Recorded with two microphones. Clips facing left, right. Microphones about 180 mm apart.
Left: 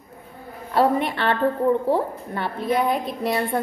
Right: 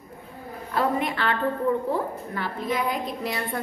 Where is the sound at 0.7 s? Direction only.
30° left (ahead or behind).